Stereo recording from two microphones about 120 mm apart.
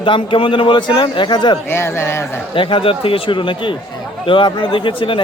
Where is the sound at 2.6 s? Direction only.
45° left (ahead or behind).